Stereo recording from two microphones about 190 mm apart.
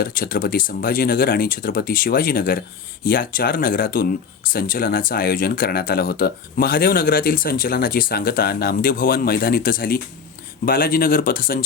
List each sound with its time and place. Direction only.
0.0 s speech: 50° left (ahead or behind)